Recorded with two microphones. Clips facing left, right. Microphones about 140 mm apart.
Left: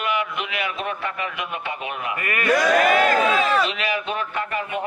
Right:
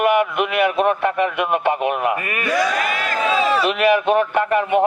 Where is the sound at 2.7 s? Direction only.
45° left (ahead or behind).